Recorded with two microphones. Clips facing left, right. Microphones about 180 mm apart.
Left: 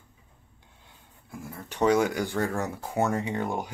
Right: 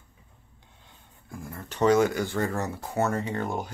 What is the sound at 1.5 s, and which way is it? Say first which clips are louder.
Speech: right 1 dB; 10° left (ahead or behind).